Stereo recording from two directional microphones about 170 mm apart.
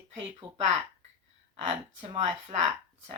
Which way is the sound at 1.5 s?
30° right (ahead or behind).